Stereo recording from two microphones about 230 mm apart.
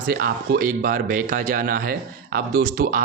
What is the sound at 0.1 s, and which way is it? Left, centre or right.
A man's voice, right.